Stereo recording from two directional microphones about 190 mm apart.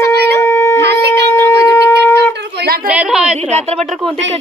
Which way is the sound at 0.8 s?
60° right (ahead or behind).